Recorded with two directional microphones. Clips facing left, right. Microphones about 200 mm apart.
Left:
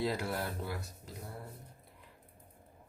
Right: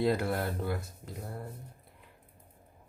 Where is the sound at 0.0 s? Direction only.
55° right (ahead or behind).